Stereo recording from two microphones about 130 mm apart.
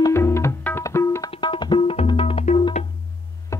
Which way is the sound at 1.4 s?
40° left (ahead or behind).